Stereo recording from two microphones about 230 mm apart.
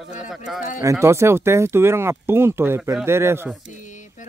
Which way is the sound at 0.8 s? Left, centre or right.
Centre.